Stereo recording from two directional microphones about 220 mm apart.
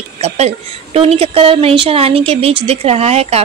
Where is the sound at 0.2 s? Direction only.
30° right (ahead or behind).